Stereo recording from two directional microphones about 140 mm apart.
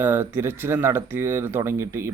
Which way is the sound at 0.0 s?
15° right (ahead or behind).